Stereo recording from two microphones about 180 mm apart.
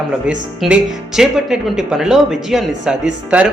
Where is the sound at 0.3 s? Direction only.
5° right (ahead or behind).